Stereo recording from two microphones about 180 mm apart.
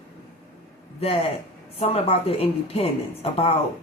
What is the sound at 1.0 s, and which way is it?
Speech, 35° left (ahead or behind).